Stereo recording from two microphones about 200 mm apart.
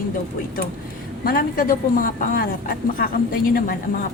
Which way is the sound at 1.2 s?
45° left (ahead or behind).